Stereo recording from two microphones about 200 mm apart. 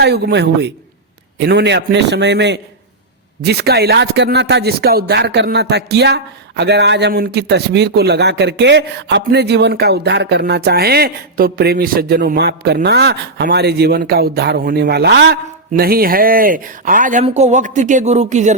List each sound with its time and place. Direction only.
0.0 s speech: 55° right (ahead or behind); by 18.5 s 35° right (ahead or behind)